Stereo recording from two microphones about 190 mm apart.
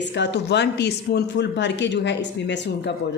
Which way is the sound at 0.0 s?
70° left (ahead or behind).